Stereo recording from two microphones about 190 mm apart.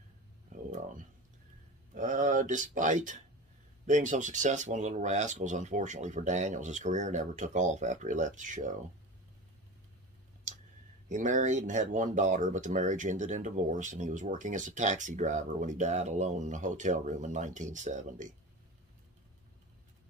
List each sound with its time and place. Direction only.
0.5 s a sound: 45° right (ahead or behind)
2.0 s speech: 40° right (ahead or behind)
11.1 s speech: 40° right (ahead or behind)